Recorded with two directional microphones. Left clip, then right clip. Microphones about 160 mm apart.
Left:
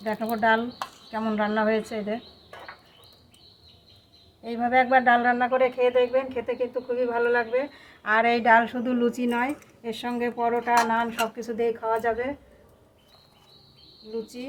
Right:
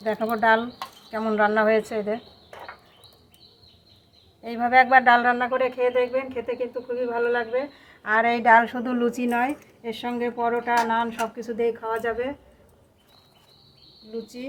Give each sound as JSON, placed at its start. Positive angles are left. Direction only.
{"t": 0.0, "sound": "speech", "side_deg": -25}
{"t": 4.4, "sound": "speech", "side_deg": -25}
{"t": 9.8, "sound": "speech", "side_deg": 10}